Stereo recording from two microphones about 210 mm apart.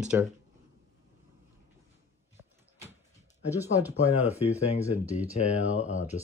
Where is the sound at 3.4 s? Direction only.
10° right (ahead or behind).